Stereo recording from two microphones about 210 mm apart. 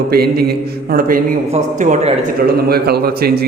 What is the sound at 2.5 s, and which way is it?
Speech, 45° right (ahead or behind).